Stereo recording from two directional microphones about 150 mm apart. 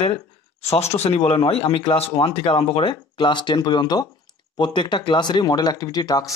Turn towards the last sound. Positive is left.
turn(degrees=25)  # may be behind; listen again after turning